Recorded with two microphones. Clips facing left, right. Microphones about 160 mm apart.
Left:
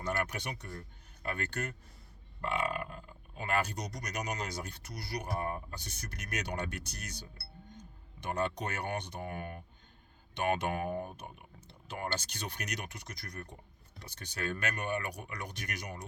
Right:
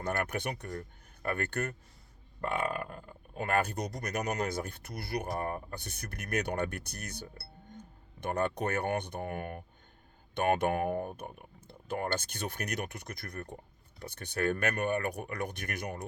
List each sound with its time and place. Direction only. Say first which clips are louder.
0.0 s speech: right 3 dB; 50° right (ahead or behind)